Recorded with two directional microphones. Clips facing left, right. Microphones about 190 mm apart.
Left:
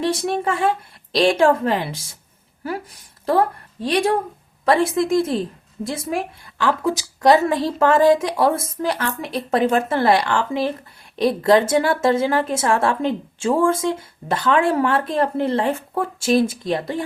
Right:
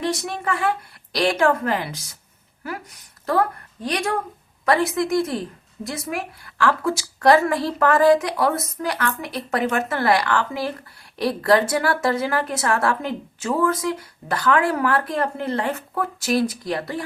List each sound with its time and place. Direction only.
0.0 s a woman's voice: 30° left (ahead or behind)